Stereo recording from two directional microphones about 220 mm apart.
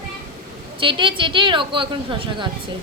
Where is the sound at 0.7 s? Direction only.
20° right (ahead or behind).